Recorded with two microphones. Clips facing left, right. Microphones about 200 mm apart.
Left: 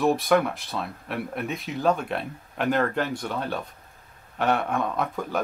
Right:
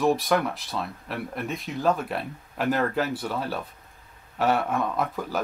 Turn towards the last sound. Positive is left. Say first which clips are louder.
# even
turn(degrees=0)  # may be behind; listen again after turning